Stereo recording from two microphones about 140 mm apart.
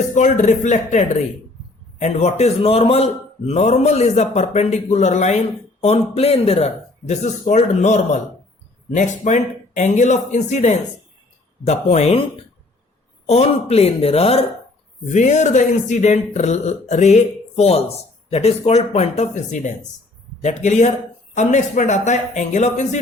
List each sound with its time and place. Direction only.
0.1 s a man's voice: 60° left (ahead or behind)
13.2 s a man's voice: 50° left (ahead or behind)
15.1 s a man's voice: 55° left (ahead or behind)